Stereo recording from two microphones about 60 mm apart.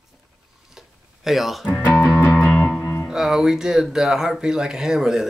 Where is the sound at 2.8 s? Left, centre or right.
Left.